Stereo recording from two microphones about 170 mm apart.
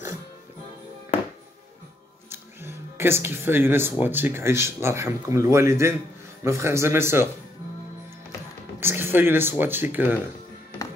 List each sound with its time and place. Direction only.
2.2 s music: 15° right (ahead or behind)
4.0 s speech: 10° right (ahead or behind)
8.7 s speech: 15° right (ahead or behind)